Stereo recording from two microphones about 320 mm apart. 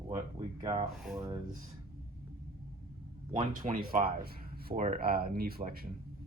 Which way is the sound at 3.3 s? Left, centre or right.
Right.